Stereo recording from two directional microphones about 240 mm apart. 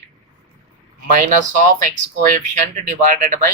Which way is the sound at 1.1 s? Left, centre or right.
Right.